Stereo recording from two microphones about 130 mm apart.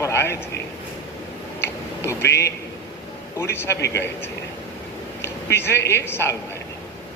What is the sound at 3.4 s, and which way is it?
Speech, 20° left (ahead or behind).